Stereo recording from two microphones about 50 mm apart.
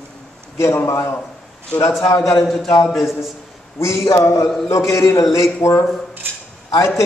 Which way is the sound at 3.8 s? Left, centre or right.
Left.